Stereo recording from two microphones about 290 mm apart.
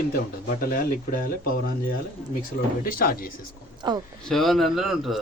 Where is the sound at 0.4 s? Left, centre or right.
Left.